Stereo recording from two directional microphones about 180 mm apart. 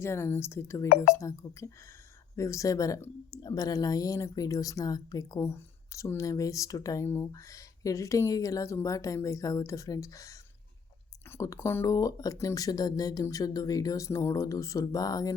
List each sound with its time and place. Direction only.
0.0 s a woman's voice: 15° left (ahead or behind)